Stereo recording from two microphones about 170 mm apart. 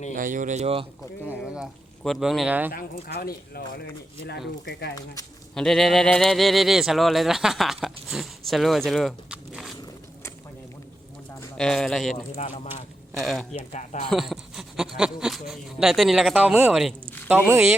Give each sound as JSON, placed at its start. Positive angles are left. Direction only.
{"t": 0.1, "sound": "speech", "side_deg": -50}
{"t": 1.3, "sound": "speech", "side_deg": -5}
{"t": 2.7, "sound": "speech", "side_deg": 60}
{"t": 4.6, "sound": "speech", "side_deg": 80}
{"t": 5.5, "sound": "speech", "side_deg": 0}
{"t": 11.3, "sound": "a man's voice", "side_deg": 5}
{"t": 12.1, "sound": "speech", "side_deg": 35}
{"t": 13.2, "sound": "speech", "side_deg": 0}
{"t": 13.5, "sound": "speech", "side_deg": 45}
{"t": 14.1, "sound": "speech", "side_deg": 0}